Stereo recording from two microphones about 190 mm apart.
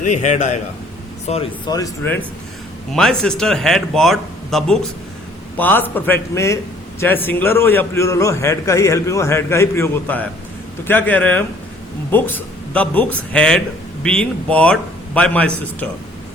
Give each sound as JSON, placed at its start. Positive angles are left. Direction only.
{"t": 0.0, "sound": "a man's voice", "side_deg": 40}
{"t": 1.3, "sound": "speech", "side_deg": 25}
{"t": 2.9, "sound": "a man's voice", "side_deg": 5}